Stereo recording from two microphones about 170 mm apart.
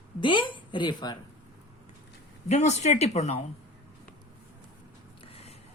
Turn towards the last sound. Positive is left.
turn(degrees=35)  # may be behind; listen again after turning